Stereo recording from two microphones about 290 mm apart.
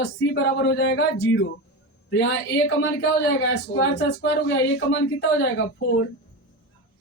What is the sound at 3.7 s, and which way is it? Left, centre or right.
Speech, left.